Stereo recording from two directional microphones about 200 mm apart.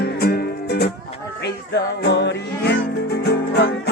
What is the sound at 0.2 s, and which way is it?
Music, 55° left (ahead or behind).